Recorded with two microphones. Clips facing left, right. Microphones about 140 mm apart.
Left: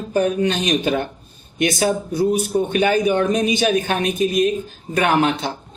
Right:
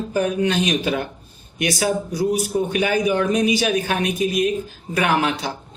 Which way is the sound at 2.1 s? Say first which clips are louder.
Left 2 dB; 25° left (ahead or behind).